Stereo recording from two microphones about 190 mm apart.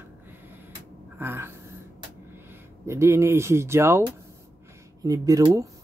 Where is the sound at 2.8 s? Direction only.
15° right (ahead or behind).